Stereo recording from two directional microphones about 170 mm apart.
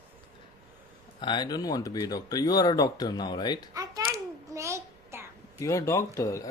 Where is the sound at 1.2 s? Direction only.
25° left (ahead or behind).